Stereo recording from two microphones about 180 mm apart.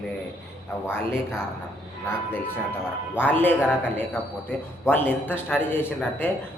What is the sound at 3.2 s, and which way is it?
A man's voice, 10° left (ahead or behind).